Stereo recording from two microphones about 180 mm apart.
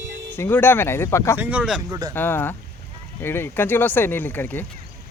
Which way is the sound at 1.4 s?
5° right (ahead or behind).